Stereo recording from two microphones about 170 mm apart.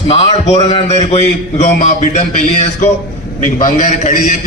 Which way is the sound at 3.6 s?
45° left (ahead or behind).